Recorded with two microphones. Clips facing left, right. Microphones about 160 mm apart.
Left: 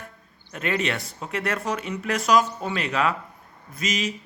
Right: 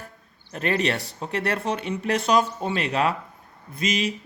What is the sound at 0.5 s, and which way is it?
Speech, 35° right (ahead or behind).